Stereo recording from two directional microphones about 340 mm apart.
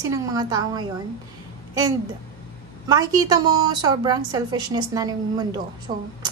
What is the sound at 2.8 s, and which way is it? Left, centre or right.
A woman's voice, centre.